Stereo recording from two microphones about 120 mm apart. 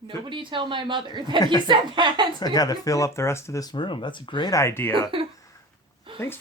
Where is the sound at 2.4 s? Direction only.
35° left (ahead or behind).